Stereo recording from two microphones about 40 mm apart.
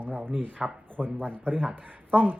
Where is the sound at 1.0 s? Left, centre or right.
Right.